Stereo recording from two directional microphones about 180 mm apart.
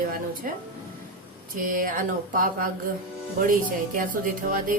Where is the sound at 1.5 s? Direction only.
50° right (ahead or behind).